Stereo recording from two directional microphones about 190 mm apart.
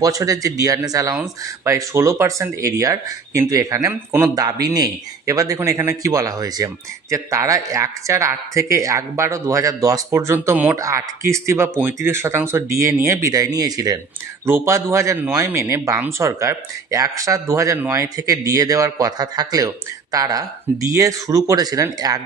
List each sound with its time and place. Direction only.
0.0 s a man's voice: 20° right (ahead or behind)